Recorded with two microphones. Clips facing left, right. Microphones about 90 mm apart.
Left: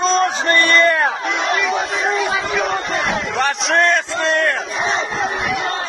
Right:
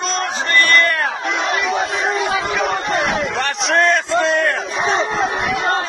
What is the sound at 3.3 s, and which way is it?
A man's voice, centre (ahead or behind).